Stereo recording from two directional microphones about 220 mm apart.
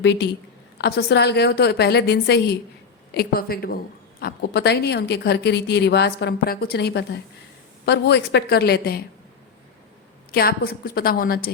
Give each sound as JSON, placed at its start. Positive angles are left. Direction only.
{"t": 0.0, "sound": "a woman's voice", "side_deg": 50}
{"t": 10.3, "sound": "a woman's voice", "side_deg": 45}